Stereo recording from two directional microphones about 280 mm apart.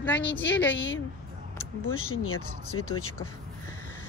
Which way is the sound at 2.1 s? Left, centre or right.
Left.